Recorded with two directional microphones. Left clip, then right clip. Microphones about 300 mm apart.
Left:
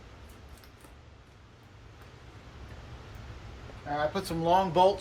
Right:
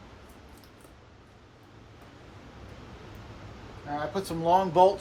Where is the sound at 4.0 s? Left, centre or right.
Centre.